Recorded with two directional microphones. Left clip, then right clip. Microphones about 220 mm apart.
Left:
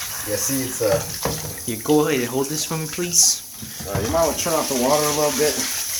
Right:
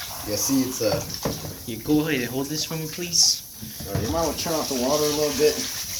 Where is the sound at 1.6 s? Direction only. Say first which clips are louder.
Left 5 dB; 20° left (ahead or behind).